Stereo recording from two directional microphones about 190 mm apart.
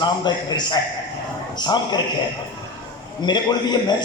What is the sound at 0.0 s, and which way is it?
A man's voice, 20° left (ahead or behind).